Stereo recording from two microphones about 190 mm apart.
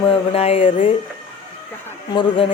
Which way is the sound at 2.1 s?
30° left (ahead or behind).